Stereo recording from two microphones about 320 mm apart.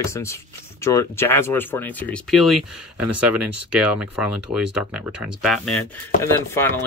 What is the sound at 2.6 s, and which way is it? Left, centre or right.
Speech, right.